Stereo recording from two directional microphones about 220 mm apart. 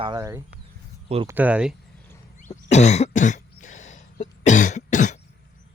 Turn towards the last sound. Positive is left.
turn(degrees=35)  # may be behind; listen again after turning